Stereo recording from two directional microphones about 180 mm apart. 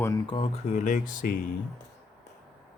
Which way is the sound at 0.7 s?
45° left (ahead or behind).